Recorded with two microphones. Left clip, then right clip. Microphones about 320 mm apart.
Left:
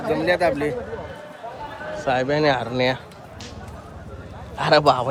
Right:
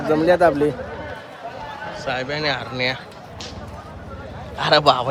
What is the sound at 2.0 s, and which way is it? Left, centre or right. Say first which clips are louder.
Speech: left 4 dB; centre.